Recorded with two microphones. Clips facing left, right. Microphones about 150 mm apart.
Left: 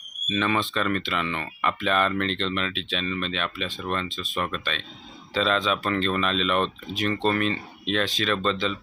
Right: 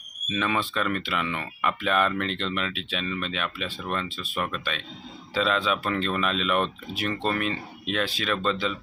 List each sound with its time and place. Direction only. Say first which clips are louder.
0.3 s speech: left 2 dB; 5° right (ahead or behind)